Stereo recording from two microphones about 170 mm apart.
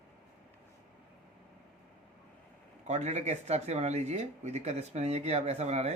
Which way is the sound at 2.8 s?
40° right (ahead or behind).